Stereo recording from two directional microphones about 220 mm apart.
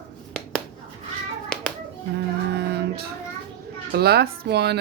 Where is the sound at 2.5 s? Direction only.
45° right (ahead or behind).